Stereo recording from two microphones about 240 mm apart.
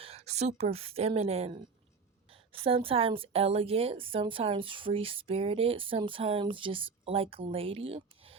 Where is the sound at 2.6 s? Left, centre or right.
Right.